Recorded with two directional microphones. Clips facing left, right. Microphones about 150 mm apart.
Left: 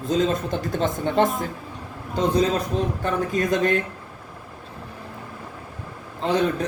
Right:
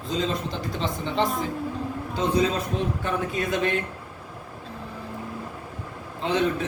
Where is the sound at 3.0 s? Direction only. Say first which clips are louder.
Left 4 dB; 45° left (ahead or behind).